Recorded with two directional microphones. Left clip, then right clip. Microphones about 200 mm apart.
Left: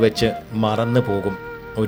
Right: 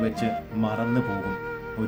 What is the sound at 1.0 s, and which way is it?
Speech, centre (ahead or behind).